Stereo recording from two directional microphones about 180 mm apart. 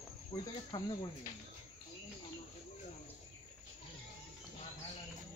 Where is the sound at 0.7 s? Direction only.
20° left (ahead or behind).